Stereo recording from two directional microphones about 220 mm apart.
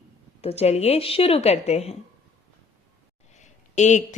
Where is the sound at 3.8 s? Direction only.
35° left (ahead or behind).